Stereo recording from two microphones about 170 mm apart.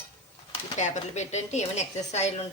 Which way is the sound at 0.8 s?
40° left (ahead or behind).